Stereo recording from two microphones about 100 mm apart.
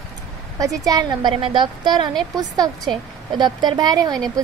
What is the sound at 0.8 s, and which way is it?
Speech, 40° right (ahead or behind).